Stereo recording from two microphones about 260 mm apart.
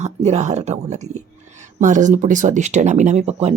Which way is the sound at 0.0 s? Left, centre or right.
Right.